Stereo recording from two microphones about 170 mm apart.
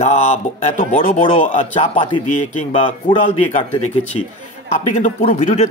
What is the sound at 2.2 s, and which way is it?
Speech, 45° left (ahead or behind).